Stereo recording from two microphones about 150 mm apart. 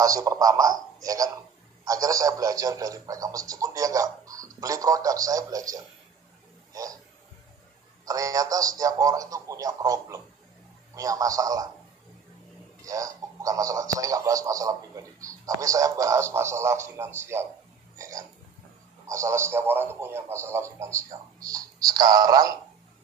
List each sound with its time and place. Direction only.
0.0 s speech: 20° right (ahead or behind)
8.0 s speech: 25° right (ahead or behind)
12.8 s speech: 20° right (ahead or behind)